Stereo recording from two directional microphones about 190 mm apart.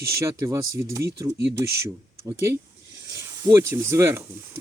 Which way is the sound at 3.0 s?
15° right (ahead or behind).